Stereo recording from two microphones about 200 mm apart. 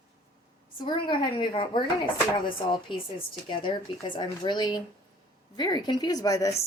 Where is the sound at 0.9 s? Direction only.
20° left (ahead or behind).